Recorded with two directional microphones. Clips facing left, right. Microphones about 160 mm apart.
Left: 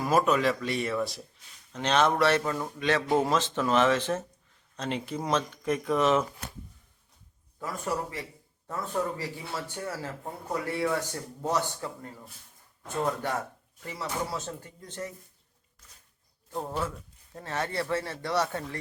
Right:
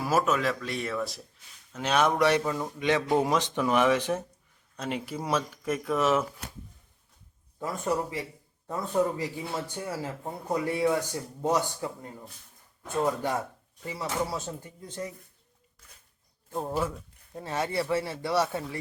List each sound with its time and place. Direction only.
0.0 s speech: centre (ahead or behind)
2.4 s speech: 5° right (ahead or behind)
7.6 s a man's voice: 20° right (ahead or behind)
13.8 s speech: 10° right (ahead or behind)
16.5 s speech: 10° right (ahead or behind)